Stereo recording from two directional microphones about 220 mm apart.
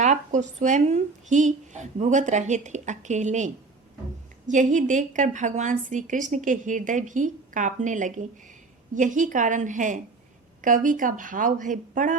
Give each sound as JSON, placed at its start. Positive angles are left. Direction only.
{"t": 0.0, "sound": "speech", "side_deg": -35}